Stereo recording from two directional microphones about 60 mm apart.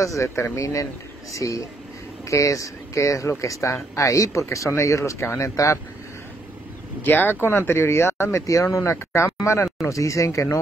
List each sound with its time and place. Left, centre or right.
0.0 s speech: left
7.0 s speech: left
8.9 s speech: left